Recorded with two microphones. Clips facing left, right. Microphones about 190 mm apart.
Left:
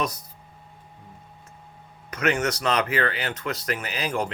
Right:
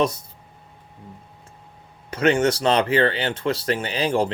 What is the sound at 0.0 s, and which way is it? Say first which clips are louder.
Speech: right 7 dB; 25° right (ahead or behind).